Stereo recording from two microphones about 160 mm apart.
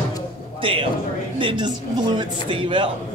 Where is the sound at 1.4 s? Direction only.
30° right (ahead or behind).